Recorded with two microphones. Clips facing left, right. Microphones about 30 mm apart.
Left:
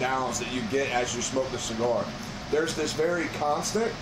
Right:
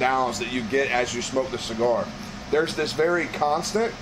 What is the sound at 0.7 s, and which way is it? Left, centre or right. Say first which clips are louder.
Speech: right 4 dB; right.